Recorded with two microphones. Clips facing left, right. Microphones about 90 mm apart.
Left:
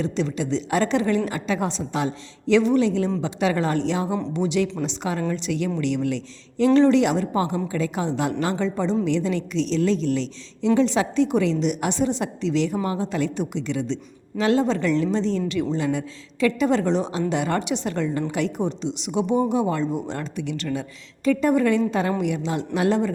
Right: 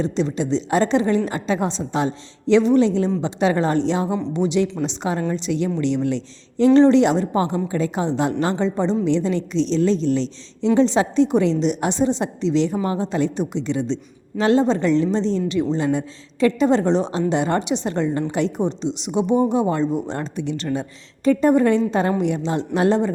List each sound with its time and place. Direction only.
0.0 s a woman's voice: 25° right (ahead or behind)